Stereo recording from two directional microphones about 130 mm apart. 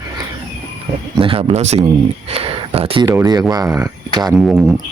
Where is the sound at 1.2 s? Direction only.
45° right (ahead or behind).